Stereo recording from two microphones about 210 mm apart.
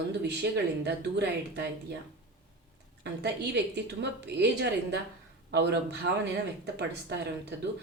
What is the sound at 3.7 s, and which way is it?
A woman's voice, 55° right (ahead or behind).